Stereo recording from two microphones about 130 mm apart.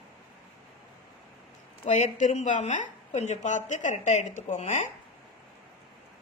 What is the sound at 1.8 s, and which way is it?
A woman's voice, 65° left (ahead or behind).